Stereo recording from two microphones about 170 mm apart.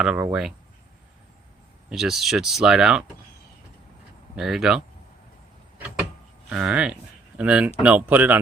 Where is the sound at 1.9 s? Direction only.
Centre (ahead or behind).